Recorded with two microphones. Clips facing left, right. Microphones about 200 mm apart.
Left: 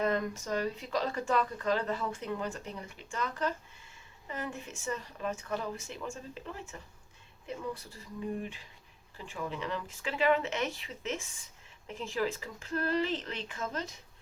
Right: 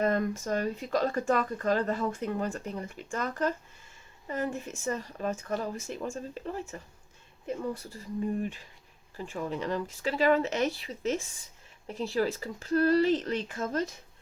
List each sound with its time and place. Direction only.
0.0 s speech: 45° right (ahead or behind)
9.1 s speech: 40° right (ahead or behind)